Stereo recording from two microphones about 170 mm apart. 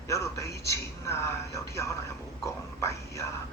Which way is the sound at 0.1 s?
15° left (ahead or behind).